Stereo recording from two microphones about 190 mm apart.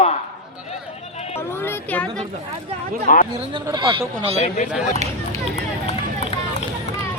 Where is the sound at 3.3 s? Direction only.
20° right (ahead or behind).